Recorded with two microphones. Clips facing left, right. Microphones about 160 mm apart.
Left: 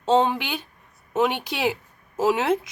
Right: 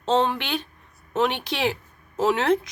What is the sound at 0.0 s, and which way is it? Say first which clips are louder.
A woman's voice: left 2 dB; 10° left (ahead or behind).